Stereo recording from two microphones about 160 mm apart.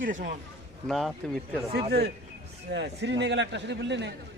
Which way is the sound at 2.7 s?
90° right.